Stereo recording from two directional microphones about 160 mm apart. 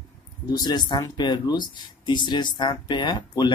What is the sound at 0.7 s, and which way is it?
A woman's voice, 25° left (ahead or behind).